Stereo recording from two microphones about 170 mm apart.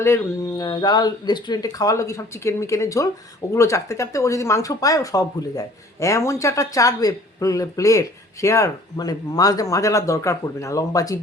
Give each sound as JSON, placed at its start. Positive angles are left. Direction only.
{"t": 0.0, "sound": "speech", "side_deg": 20}